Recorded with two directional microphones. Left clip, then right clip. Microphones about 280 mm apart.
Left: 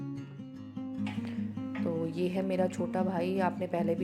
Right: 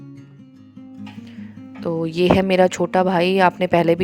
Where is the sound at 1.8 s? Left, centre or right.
Right.